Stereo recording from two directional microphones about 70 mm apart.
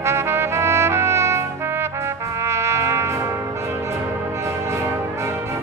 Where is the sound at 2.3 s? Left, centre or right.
Right.